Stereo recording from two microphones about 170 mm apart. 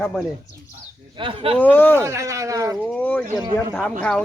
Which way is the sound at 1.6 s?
10° left (ahead or behind).